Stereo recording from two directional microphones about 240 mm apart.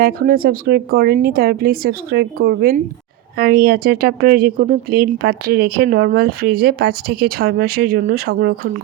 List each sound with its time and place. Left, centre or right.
0.0 s speech: right